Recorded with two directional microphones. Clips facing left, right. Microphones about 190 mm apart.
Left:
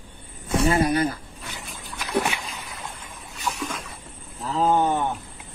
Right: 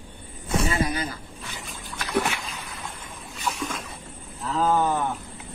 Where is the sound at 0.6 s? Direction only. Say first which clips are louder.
Left 8 dB; 55° left (ahead or behind).